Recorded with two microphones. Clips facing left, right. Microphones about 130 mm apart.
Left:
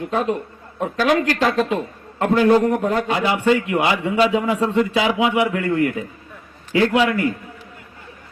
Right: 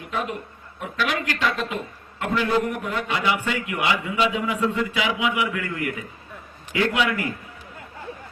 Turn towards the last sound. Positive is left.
turn(degrees=35)  # may be behind; listen again after turning